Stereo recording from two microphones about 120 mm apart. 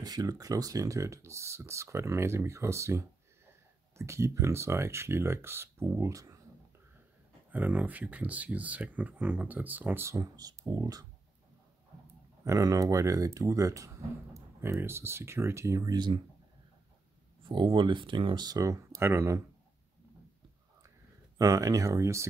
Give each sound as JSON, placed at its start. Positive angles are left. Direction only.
{"t": 0.0, "sound": "speech", "side_deg": -35}
{"t": 7.5, "sound": "speech", "side_deg": -15}
{"t": 12.4, "sound": "speech", "side_deg": -30}
{"t": 17.4, "sound": "speech", "side_deg": -45}
{"t": 21.4, "sound": "speech", "side_deg": -30}